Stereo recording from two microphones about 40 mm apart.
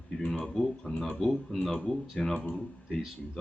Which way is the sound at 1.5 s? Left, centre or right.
Left.